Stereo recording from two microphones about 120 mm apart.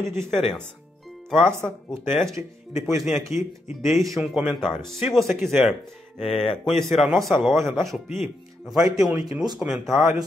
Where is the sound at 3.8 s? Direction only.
Centre (ahead or behind).